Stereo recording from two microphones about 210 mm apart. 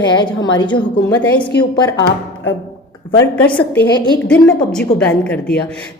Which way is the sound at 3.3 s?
5° left (ahead or behind).